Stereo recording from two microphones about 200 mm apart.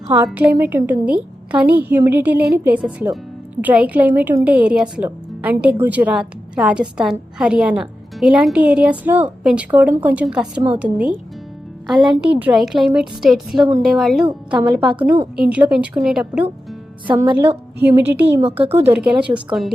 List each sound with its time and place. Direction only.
0.3 s a woman's voice: 10° right (ahead or behind)
17.1 s speech: 25° right (ahead or behind)
17.8 s speech: 10° right (ahead or behind)
18.3 s speech: 30° right (ahead or behind)
18.7 s speech: 10° right (ahead or behind)